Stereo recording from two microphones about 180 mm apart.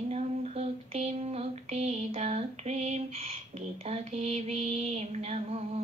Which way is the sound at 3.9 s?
35° right (ahead or behind).